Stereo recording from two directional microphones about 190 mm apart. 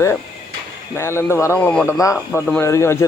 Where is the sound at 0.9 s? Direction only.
15° left (ahead or behind).